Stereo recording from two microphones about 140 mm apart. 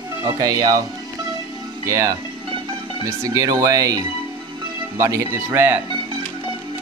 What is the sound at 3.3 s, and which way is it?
Speech, 25° right (ahead or behind).